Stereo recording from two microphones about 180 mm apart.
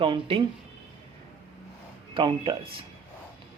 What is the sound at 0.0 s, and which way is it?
Speech, 30° right (ahead or behind).